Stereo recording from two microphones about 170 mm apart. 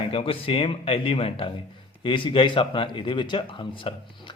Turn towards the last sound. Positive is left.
turn(degrees=30)  # may be behind; listen again after turning